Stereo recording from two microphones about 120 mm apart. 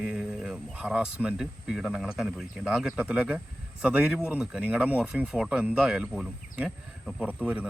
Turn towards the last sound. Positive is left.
turn(degrees=-10)  # may be behind; listen again after turning